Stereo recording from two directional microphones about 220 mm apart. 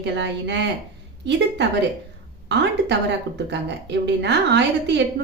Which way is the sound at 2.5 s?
50° right (ahead or behind).